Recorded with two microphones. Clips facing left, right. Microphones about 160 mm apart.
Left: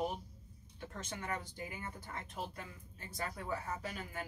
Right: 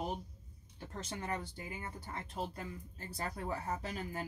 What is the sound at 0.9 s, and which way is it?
Speech, 30° right (ahead or behind).